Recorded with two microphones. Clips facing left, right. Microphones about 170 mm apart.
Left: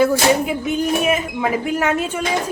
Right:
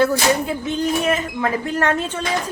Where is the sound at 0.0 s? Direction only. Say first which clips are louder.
Left 2 dB; 10° left (ahead or behind).